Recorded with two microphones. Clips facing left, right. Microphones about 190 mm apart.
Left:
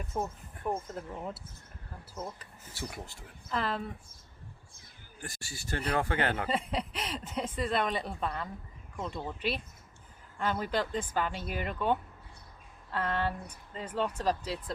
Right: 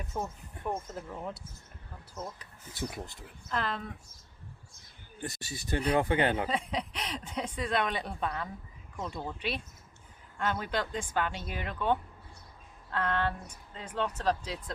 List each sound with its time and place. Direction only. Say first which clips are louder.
0.0 s speech: left 2 dB; centre (ahead or behind)
2.7 s speech: right 3 dB; 20° right (ahead or behind)
3.5 s speech: left 1 dB; 5° left (ahead or behind)
5.2 s speech: right 5 dB; 20° right (ahead or behind)
6.5 s speech: left 1 dB; 5° left (ahead or behind)